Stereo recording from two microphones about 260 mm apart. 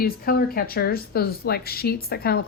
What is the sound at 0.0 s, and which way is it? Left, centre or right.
Speech, left.